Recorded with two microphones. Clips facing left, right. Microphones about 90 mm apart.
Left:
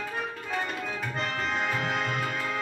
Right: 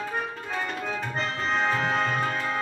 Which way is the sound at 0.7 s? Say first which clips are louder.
Right 2 dB; 35° right (ahead or behind).